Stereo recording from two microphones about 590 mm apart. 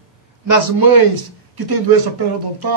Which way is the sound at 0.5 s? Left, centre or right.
Right.